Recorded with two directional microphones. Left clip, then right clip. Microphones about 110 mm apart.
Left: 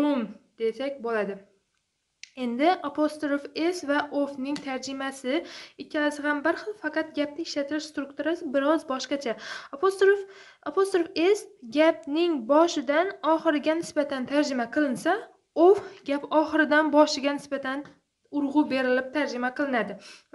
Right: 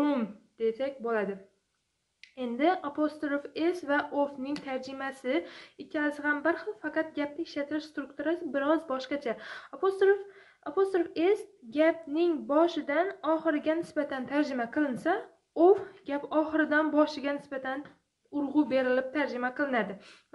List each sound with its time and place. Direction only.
0.0 s a sound: 15° left (ahead or behind)
0.6 s speech: 30° left (ahead or behind)
2.3 s a woman's voice: 40° left (ahead or behind); by 17.7 s 55° left (ahead or behind)
18.3 s speech: 35° left (ahead or behind)